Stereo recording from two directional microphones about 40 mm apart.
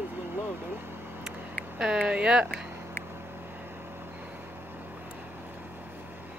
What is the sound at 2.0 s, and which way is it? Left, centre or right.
Speech, right.